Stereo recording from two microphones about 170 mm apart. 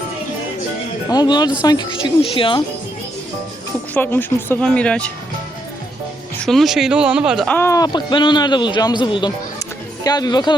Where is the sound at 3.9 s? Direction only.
10° left (ahead or behind).